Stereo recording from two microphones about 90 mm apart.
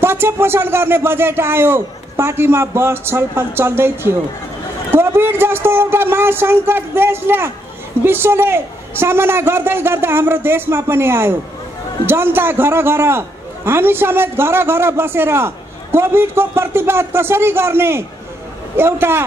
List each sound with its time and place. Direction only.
0.0 s a man's voice: 25° right (ahead or behind)